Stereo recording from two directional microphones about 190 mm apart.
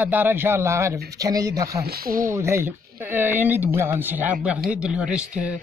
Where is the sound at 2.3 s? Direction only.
15° right (ahead or behind).